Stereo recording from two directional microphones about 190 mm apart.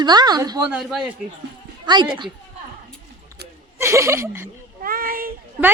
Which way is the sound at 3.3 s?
15° right (ahead or behind).